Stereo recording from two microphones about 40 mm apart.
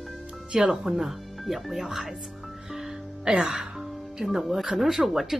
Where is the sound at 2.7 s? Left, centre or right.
Centre.